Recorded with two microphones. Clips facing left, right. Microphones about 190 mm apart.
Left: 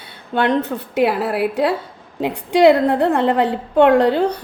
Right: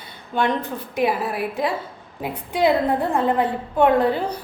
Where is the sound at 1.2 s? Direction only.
70° left (ahead or behind).